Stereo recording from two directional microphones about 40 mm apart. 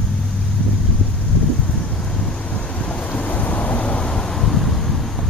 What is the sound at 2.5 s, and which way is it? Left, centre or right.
Vehicle, left.